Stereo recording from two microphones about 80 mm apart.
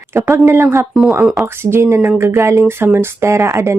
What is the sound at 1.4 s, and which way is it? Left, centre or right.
Speech, right.